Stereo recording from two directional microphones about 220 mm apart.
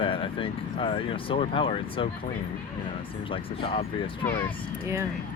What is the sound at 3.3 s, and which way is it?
Speech, 25° left (ahead or behind).